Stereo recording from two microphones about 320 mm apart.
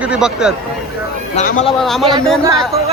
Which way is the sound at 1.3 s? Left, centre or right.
Left.